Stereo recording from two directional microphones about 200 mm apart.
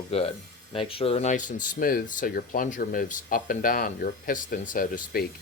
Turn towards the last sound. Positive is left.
turn(degrees=45)  # may be behind; listen again after turning